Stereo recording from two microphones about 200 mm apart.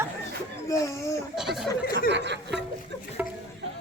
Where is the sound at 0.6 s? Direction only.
15° left (ahead or behind).